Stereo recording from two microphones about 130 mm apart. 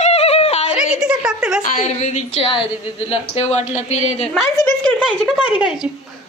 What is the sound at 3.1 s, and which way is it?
Speech, 55° left (ahead or behind).